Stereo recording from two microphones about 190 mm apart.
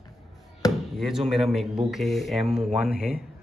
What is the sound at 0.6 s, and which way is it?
Chop, 20° left (ahead or behind).